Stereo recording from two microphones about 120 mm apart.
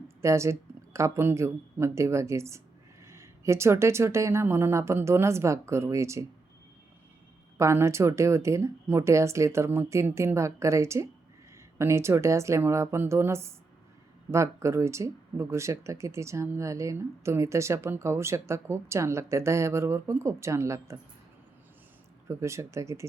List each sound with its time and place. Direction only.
0.2 s speech: 25° right (ahead or behind)
7.6 s speech: 25° right (ahead or behind)
22.3 s speech: 25° right (ahead or behind)